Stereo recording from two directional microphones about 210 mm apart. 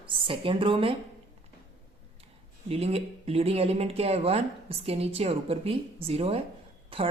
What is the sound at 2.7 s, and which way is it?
Speech, 30° right (ahead or behind).